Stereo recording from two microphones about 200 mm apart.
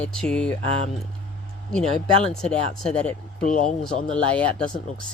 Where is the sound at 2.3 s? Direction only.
5° left (ahead or behind).